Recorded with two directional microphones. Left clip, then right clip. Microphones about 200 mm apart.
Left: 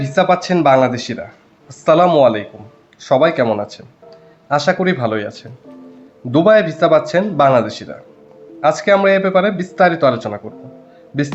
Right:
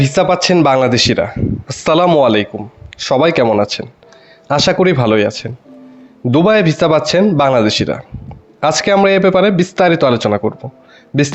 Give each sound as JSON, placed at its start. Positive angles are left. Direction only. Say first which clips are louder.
{"t": 0.0, "sound": "a man's voice", "louder": "right 2 dB", "side_deg": -45}